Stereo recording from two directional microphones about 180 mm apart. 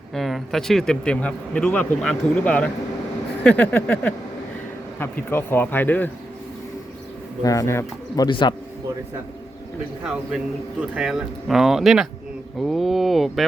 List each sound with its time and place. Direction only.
0.1 s speech: centre (ahead or behind)
7.4 s speech: 15° left (ahead or behind)
10.8 s speech: 5° right (ahead or behind)